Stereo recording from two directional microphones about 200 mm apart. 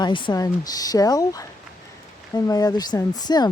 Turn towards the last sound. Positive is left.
turn(degrees=20)  # may be behind; listen again after turning